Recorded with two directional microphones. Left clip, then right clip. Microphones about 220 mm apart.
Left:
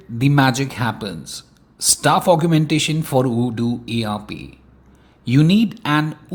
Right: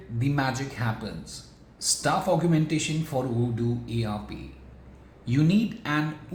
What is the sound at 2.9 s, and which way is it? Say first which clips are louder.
Speech: left 10 dB; 30° left (ahead or behind).